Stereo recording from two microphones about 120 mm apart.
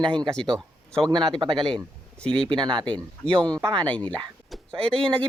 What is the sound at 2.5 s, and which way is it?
Speech, 40° right (ahead or behind).